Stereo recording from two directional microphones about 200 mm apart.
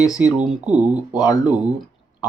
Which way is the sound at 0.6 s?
5° right (ahead or behind).